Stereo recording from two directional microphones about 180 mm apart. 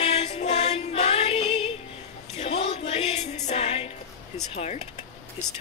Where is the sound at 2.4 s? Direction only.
35° left (ahead or behind).